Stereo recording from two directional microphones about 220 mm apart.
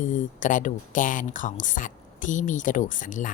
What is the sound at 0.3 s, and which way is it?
A woman's voice, 35° left (ahead or behind).